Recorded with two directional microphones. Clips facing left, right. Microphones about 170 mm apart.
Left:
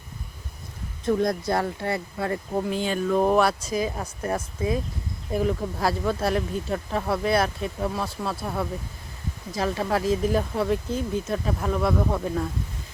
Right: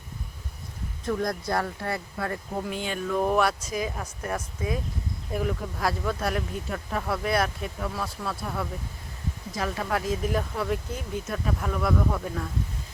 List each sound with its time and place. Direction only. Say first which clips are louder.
1.0 s speech: left 5 dB; 25° left (ahead or behind)